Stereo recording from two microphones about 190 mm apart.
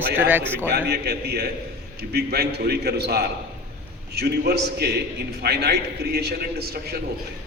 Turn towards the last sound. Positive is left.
turn(degrees=-55)  # may be behind; listen again after turning